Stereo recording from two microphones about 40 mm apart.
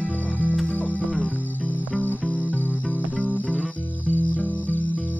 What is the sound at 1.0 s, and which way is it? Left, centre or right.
Music, centre.